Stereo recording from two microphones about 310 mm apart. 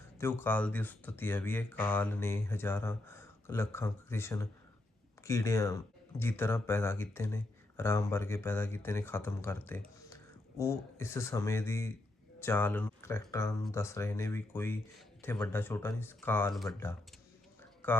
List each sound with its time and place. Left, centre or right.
0.2 s speech: centre
17.8 s speech: centre